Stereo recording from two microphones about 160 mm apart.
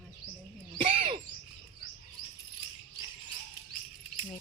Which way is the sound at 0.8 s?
35° right (ahead or behind).